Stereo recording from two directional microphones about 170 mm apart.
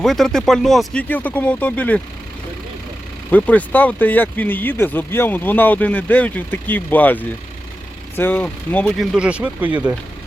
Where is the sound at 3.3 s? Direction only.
10° left (ahead or behind); by 10.0 s 10° right (ahead or behind).